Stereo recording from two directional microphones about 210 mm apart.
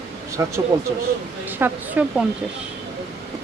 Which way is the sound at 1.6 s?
10° right (ahead or behind).